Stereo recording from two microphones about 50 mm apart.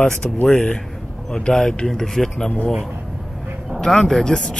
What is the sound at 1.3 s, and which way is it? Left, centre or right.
Speech, centre.